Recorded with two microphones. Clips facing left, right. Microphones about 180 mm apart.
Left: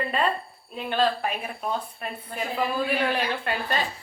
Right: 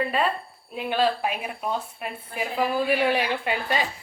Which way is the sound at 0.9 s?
10° right (ahead or behind).